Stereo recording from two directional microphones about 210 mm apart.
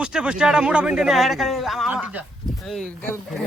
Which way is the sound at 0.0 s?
5° right (ahead or behind).